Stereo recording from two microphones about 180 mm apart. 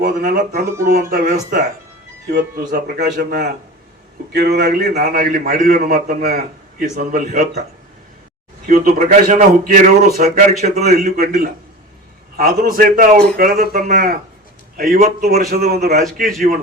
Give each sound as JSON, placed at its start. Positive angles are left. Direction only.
{"t": 0.0, "sound": "a man's voice", "side_deg": -55}
{"t": 2.6, "sound": "a man's voice", "side_deg": -55}
{"t": 8.6, "sound": "a man's voice", "side_deg": -45}
{"t": 10.8, "sound": "a man's voice", "side_deg": -55}